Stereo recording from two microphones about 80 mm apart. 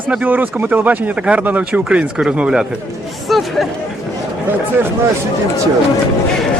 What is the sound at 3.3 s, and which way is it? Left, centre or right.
Speech, centre.